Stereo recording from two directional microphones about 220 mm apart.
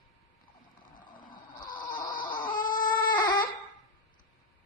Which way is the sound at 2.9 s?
20° left (ahead or behind).